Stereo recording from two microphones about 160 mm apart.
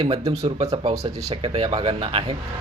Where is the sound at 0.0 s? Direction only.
35° right (ahead or behind).